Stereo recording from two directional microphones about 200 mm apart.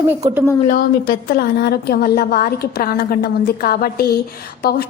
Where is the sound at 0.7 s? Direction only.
45° left (ahead or behind).